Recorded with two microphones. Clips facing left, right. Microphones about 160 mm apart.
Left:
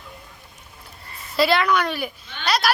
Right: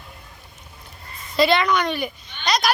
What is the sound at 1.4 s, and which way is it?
A woman's voice, 5° left (ahead or behind).